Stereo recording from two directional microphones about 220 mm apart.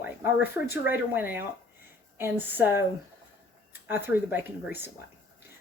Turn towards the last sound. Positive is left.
turn(degrees=-10)  # may be behind; listen again after turning